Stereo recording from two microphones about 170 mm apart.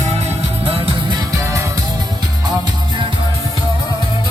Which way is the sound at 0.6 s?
30° right (ahead or behind).